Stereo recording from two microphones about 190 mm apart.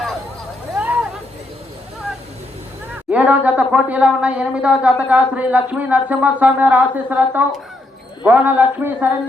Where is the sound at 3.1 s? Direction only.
10° right (ahead or behind).